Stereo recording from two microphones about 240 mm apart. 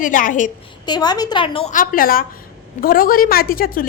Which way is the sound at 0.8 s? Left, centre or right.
Centre.